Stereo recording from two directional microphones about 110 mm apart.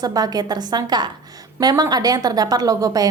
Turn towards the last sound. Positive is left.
turn(degrees=-35)  # may be behind; listen again after turning